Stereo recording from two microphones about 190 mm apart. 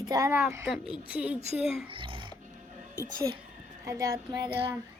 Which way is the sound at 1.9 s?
25° right (ahead or behind).